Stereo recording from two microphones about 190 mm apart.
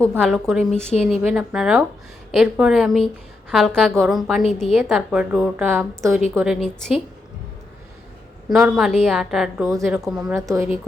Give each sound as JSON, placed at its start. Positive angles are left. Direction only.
{"t": 0.2, "sound": "a woman's voice", "side_deg": 0}
{"t": 8.4, "sound": "a woman's voice", "side_deg": 0}
{"t": 10.3, "sound": "a woman's voice", "side_deg": -15}